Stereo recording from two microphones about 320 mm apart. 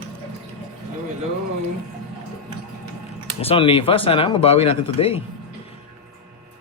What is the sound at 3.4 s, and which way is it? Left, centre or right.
Speech, centre.